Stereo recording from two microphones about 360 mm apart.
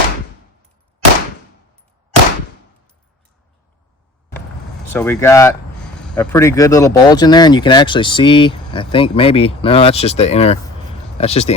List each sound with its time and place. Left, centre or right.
4.9 s speech: centre